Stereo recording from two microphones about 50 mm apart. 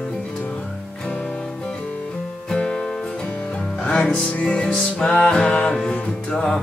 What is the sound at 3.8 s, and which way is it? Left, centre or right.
Music, left.